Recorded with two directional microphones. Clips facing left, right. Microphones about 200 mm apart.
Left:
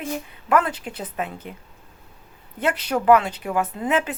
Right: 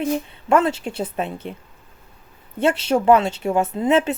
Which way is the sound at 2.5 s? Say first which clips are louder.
Right 5 dB; 25° right (ahead or behind).